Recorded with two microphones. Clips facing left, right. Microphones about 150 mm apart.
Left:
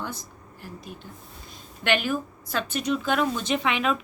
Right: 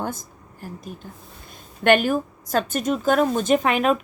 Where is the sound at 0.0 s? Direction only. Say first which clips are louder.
Right 6 dB; 45° right (ahead or behind).